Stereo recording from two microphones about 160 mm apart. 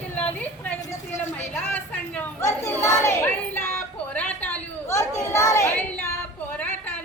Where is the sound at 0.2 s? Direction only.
10° left (ahead or behind).